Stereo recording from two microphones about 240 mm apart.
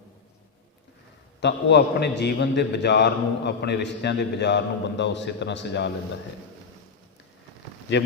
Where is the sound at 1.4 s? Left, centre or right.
Left.